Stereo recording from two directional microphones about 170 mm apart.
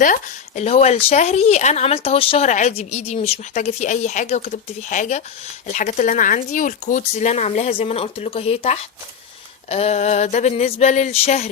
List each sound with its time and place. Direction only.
0.0 s a woman's voice: 45° left (ahead or behind)